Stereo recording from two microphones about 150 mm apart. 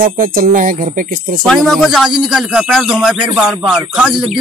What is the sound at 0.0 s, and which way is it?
Speech, 70° right (ahead or behind).